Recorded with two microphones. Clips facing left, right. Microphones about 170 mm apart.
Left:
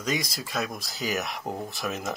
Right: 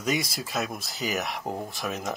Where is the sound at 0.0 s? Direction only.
10° right (ahead or behind).